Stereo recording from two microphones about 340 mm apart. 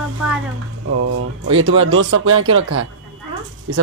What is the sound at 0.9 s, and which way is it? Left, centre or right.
Speech, right.